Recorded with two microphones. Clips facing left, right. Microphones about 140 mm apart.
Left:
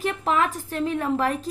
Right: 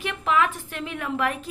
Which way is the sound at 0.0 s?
35° left (ahead or behind).